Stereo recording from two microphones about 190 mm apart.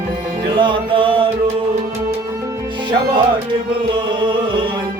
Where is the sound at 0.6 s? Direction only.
25° right (ahead or behind).